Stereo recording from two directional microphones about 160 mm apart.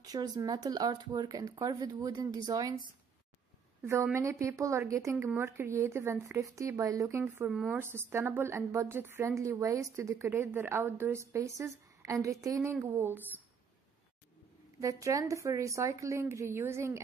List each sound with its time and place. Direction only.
0.0 s a woman's voice: 25° right (ahead or behind)
7.4 s speech: 5° right (ahead or behind)
7.8 s a woman's voice: 15° right (ahead or behind)
14.8 s speech: 20° right (ahead or behind)